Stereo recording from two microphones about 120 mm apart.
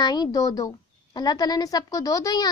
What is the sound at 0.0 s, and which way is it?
A woman's voice, 35° left (ahead or behind).